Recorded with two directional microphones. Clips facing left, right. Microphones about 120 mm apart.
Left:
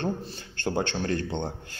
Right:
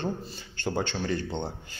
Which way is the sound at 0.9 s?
5° right (ahead or behind).